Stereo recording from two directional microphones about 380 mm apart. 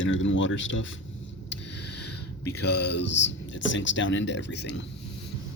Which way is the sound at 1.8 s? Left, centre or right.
Left.